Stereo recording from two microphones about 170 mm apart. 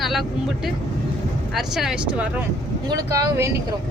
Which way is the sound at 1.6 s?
5° right (ahead or behind).